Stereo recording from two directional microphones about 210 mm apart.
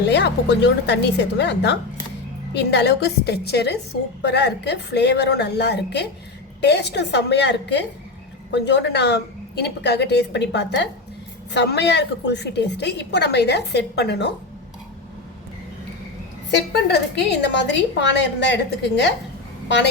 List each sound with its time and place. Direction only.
0.1 s a woman's voice: 55° left (ahead or behind)
17.7 s a woman's voice: 55° left (ahead or behind)